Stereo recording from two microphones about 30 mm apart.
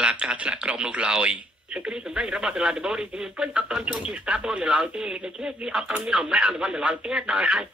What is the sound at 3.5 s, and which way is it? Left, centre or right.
Speech, right.